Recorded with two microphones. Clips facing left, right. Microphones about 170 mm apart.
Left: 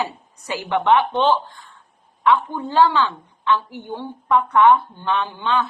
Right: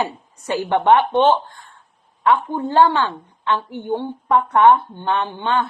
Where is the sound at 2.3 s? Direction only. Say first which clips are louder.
Right 1 dB; 25° right (ahead or behind).